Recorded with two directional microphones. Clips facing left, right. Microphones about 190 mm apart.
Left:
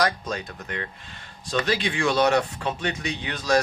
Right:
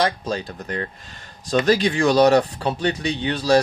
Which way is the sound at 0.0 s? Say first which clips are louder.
Right 3 dB; 30° right (ahead or behind).